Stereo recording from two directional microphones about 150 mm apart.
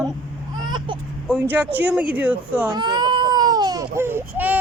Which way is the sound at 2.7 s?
30° right (ahead or behind).